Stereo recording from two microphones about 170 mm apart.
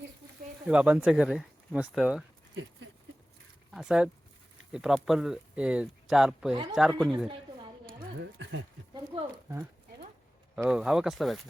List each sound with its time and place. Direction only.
0.6 s speech: 5° right (ahead or behind)
3.7 s speech: 5° right (ahead or behind)
6.5 s speech: 25° right (ahead or behind)
6.7 s speech: centre (ahead or behind)
8.2 s speech: 90° right
10.5 s speech: 5° right (ahead or behind)